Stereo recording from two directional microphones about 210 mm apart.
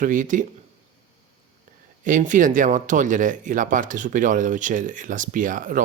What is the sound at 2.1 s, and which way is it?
Speech, 35° right (ahead or behind).